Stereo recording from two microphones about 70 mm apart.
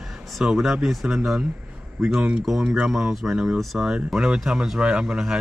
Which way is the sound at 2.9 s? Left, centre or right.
Centre.